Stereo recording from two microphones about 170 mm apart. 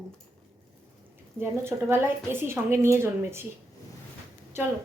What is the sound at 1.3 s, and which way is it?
A woman's voice, 15° right (ahead or behind).